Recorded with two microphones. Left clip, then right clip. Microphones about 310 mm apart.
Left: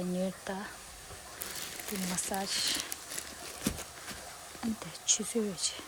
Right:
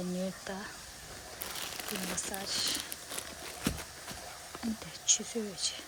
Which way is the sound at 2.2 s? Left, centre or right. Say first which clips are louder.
Left 3 dB; centre.